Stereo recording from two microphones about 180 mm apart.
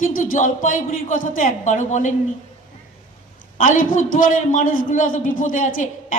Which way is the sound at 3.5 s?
45° left (ahead or behind).